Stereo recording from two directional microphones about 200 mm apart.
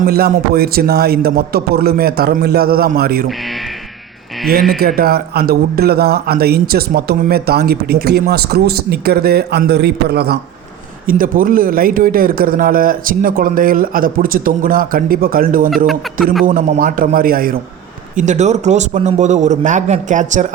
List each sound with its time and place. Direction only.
0.0 s speech: 50° right (ahead or behind)
3.2 s speech: centre (ahead or behind)
4.8 s speech: 50° right (ahead or behind)
18.2 s a man's voice: 35° right (ahead or behind)